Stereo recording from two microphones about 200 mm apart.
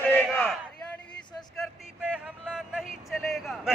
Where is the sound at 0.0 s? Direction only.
5° left (ahead or behind).